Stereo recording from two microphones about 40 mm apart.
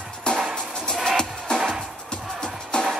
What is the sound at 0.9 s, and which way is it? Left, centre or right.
Music, centre.